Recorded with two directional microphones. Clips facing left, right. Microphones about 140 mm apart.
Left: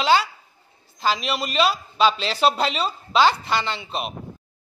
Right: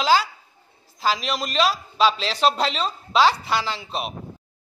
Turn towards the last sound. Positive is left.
turn(degrees=0)  # may be behind; listen again after turning